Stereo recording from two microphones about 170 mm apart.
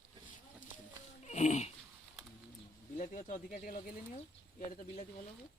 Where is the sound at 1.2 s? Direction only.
45° left (ahead or behind).